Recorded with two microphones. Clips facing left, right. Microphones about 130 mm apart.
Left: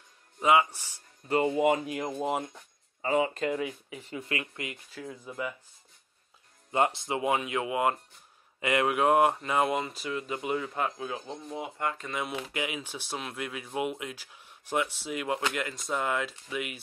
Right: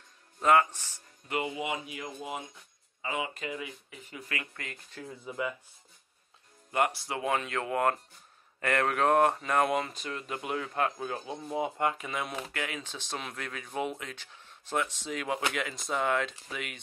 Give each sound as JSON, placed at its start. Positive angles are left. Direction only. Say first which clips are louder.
{"t": 0.4, "sound": "speech", "louder": "even", "side_deg": 10}
{"t": 1.3, "sound": "speech", "louder": "left 8 dB", "side_deg": 40}
{"t": 3.0, "sound": "speech", "louder": "left 8 dB", "side_deg": 40}
{"t": 4.1, "sound": "speech", "louder": "left 5 dB", "side_deg": 25}
{"t": 6.7, "sound": "speech", "louder": "left 2 dB", "side_deg": 20}
{"t": 12.5, "sound": "speech", "louder": "left 3 dB", "side_deg": 15}